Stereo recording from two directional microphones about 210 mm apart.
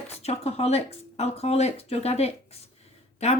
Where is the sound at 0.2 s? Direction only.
30° left (ahead or behind).